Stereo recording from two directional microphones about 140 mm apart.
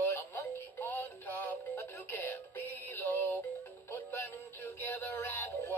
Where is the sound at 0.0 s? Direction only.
15° left (ahead or behind).